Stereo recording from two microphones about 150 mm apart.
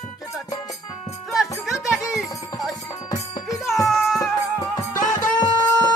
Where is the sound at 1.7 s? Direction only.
Centre (ahead or behind).